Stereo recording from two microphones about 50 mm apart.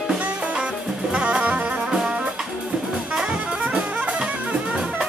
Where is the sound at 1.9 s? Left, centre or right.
Centre.